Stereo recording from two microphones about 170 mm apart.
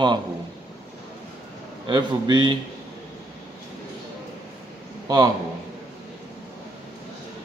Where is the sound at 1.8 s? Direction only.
25° right (ahead or behind).